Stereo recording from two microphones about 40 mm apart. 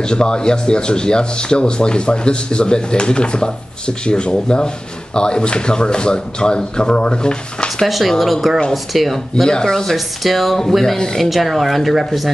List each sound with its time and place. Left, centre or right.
0.0 s speech: left
7.8 s speech: centre
9.5 s speech: centre
9.9 s speech: centre